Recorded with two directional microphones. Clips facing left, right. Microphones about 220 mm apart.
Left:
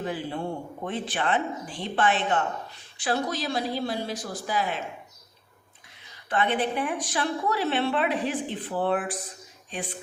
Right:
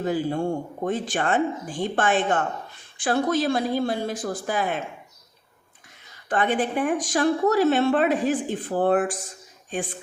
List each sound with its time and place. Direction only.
0.0 s a woman's voice: 45° right (ahead or behind)
6.2 s a woman's voice: 45° right (ahead or behind)